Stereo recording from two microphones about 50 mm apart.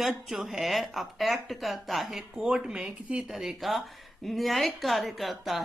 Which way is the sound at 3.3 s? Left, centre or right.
Centre.